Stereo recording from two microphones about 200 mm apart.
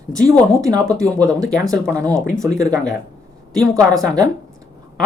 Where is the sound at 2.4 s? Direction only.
15° right (ahead or behind).